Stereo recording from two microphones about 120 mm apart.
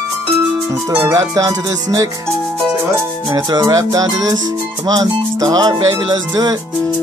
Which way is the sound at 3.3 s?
30° right (ahead or behind).